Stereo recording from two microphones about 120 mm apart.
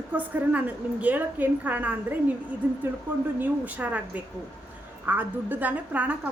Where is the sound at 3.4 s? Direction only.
15° right (ahead or behind).